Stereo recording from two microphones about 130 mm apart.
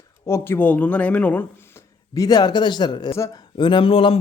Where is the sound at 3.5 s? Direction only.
40° left (ahead or behind).